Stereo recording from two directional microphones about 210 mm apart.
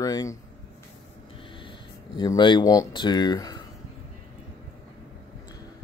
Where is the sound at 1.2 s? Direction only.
25° left (ahead or behind).